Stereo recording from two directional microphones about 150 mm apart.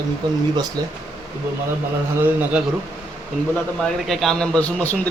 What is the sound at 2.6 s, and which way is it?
Speech, 5° right (ahead or behind).